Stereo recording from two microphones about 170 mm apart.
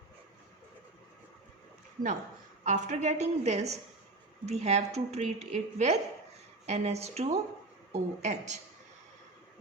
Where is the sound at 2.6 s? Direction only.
45° right (ahead or behind).